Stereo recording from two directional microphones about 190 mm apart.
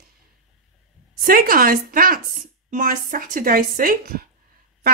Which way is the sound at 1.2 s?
50° right (ahead or behind).